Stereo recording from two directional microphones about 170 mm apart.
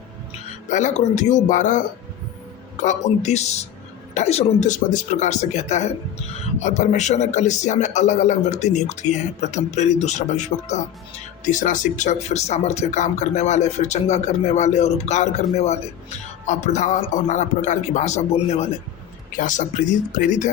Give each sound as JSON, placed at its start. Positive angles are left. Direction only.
{"t": 0.7, "sound": "speech", "side_deg": 45}
{"t": 2.8, "sound": "speech", "side_deg": 40}
{"t": 19.4, "sound": "speech", "side_deg": 50}